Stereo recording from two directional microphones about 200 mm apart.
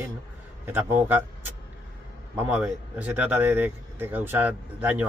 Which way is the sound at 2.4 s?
5° right (ahead or behind).